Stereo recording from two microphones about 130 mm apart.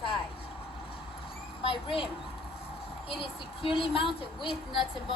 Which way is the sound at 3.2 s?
45° left (ahead or behind).